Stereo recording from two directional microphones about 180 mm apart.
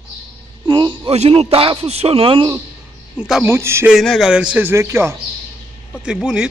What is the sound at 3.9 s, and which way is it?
Speech, centre (ahead or behind).